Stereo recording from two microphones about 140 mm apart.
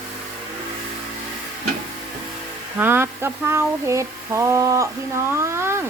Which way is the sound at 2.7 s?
15° right (ahead or behind).